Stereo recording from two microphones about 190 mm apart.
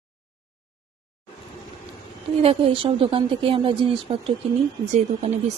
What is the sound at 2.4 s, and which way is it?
Speech, 30° right (ahead or behind).